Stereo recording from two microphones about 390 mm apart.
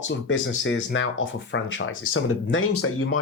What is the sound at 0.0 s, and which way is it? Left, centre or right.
Speech, left.